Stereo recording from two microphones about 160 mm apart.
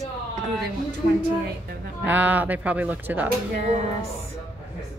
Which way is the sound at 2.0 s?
10° right (ahead or behind).